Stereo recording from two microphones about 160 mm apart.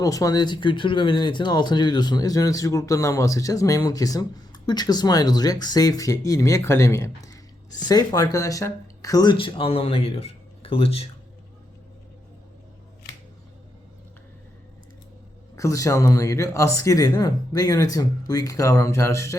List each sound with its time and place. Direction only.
0.0 s speech: 20° left (ahead or behind); by 11.1 s 40° left (ahead or behind)
15.5 s speech: 20° left (ahead or behind)